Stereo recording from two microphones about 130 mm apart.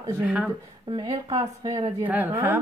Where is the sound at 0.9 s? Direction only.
35° right (ahead or behind).